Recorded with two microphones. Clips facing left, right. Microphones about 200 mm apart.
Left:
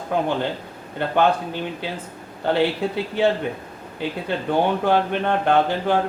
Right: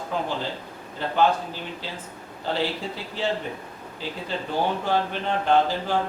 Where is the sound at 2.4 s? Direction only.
60° left (ahead or behind).